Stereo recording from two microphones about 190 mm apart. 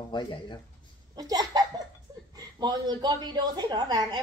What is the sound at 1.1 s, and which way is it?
A woman's voice, 20° right (ahead or behind).